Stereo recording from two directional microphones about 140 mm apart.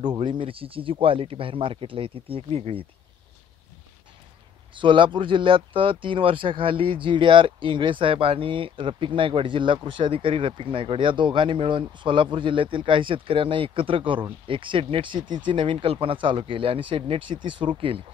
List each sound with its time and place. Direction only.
0.0 s speech: 30° right (ahead or behind)
4.7 s speech: 35° right (ahead or behind)